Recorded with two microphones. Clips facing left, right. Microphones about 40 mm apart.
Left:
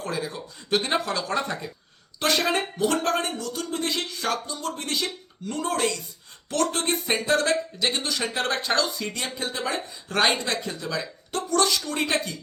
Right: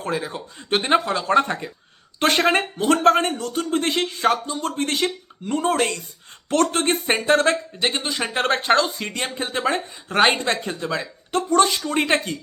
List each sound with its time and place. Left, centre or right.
0.0 s speech: right
10.1 s speech: right
10.3 s speech: right